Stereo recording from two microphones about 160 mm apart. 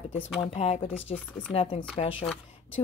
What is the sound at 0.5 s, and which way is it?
A woman's voice, 40° left (ahead or behind).